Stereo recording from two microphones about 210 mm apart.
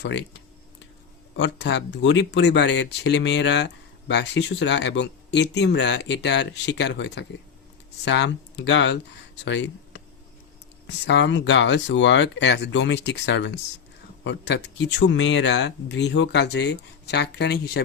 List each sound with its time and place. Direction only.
0.0 s a sound: 55° left (ahead or behind)
1.4 s speech: 55° left (ahead or behind)
11.0 s speech: 60° left (ahead or behind)